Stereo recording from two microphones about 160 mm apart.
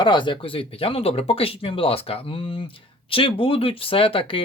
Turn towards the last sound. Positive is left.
turn(degrees=35)  # may be behind; listen again after turning